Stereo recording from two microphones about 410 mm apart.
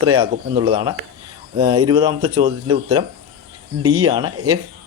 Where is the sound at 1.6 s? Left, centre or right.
Right.